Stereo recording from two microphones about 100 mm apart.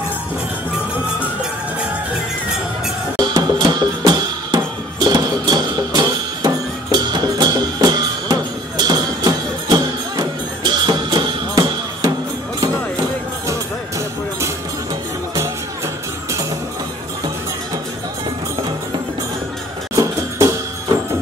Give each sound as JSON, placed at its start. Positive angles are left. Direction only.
{"t": 3.2, "sound": "music", "side_deg": -45}
{"t": 20.0, "sound": "music", "side_deg": -35}